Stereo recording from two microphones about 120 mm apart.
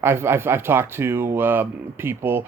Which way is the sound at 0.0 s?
20° right (ahead or behind).